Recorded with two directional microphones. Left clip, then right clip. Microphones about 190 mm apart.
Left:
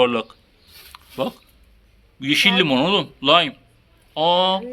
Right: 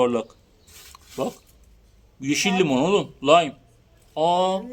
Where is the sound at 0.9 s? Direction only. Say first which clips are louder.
Left 3 dB; centre (ahead or behind).